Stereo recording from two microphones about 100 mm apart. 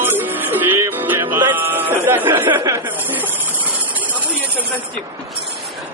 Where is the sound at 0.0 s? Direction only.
20° right (ahead or behind).